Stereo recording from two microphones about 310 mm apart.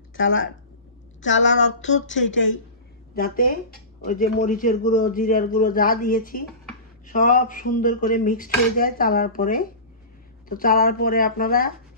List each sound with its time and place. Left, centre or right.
0.1 s a woman's voice: left
3.2 s speech: left